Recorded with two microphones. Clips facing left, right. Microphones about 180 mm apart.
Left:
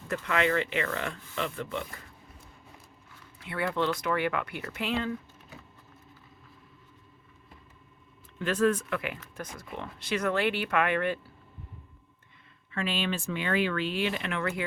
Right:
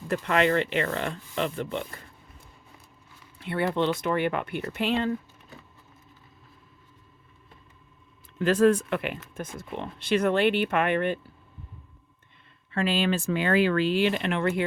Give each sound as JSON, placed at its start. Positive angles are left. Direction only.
{"t": 0.3, "sound": "speech", "side_deg": -35}
{"t": 3.5, "sound": "speech", "side_deg": -25}
{"t": 8.4, "sound": "speech", "side_deg": -35}
{"t": 12.7, "sound": "speech", "side_deg": -35}